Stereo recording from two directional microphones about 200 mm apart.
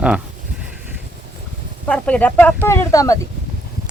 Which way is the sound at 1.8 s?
5° left (ahead or behind).